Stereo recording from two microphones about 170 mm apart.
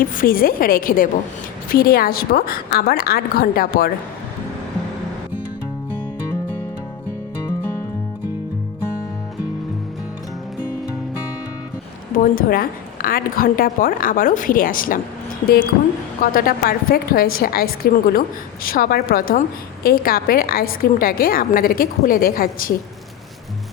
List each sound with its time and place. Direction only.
0.0 s a woman's voice: 55° left (ahead or behind)
12.1 s a woman's voice: 55° left (ahead or behind)